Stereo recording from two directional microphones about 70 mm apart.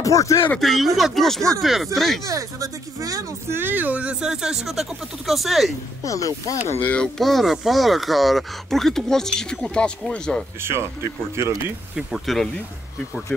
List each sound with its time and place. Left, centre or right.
0.0 s speech: left
0.6 s speech: centre
2.2 s speech: right
3.4 s speech: right; by 5.7 s centre
6.0 s speech: left
6.8 s speech: left
7.2 s speech: centre
10.6 s speech: right
12.3 s speech: centre